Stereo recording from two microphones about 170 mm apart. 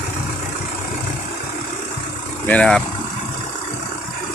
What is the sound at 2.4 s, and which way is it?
Speech, 5° left (ahead or behind).